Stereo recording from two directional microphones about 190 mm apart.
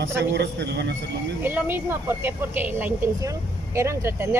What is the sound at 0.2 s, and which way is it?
Speech, 65° right (ahead or behind).